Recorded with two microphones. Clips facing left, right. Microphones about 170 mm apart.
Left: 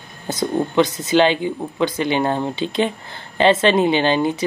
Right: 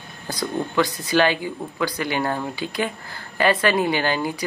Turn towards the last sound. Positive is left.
turn(degrees=25)  # may be behind; listen again after turning